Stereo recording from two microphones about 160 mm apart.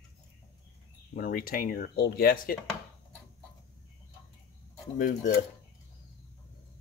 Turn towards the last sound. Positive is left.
turn(degrees=55)  # may be behind; listen again after turning